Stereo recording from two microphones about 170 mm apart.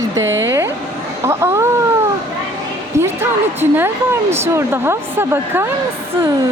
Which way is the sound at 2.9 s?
15° right (ahead or behind).